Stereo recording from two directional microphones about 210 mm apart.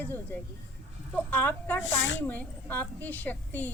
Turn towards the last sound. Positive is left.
turn(degrees=10)  # may be behind; listen again after turning